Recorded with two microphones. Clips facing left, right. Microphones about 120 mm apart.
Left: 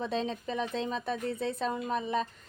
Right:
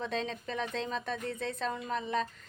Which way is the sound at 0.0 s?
5° left (ahead or behind).